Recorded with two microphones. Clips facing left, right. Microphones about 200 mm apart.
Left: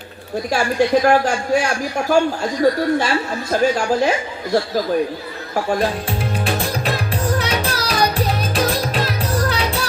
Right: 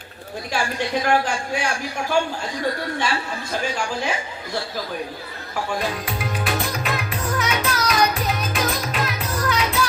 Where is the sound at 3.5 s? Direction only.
40° left (ahead or behind).